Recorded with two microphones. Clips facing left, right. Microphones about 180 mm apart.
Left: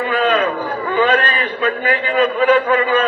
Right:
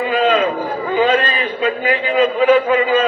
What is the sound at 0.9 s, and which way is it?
A man's voice, 20° right (ahead or behind).